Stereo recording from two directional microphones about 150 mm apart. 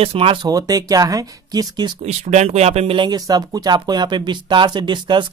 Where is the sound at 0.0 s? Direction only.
40° right (ahead or behind).